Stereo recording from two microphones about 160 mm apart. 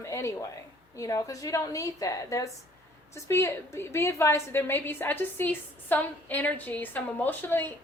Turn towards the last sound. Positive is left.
turn(degrees=15)  # may be behind; listen again after turning